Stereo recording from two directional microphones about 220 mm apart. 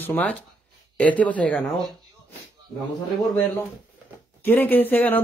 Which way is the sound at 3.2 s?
5° left (ahead or behind).